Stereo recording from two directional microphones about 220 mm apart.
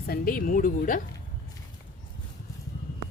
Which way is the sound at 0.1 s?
40° left (ahead or behind).